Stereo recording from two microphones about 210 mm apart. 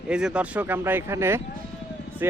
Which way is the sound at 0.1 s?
5° right (ahead or behind).